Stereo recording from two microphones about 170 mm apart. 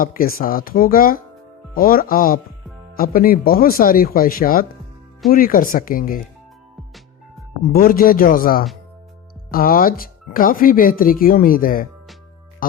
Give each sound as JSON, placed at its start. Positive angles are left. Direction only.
{"t": 0.0, "sound": "speech", "side_deg": 55}
{"t": 7.7, "sound": "speech", "side_deg": 60}